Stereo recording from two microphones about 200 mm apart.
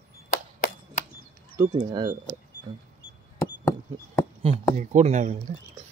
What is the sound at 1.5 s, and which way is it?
Speech, 20° right (ahead or behind).